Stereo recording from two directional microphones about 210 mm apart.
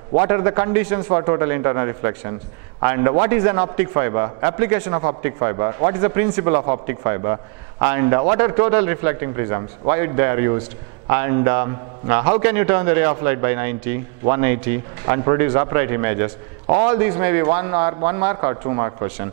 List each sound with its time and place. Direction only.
0.2 s a man's voice: 15° right (ahead or behind)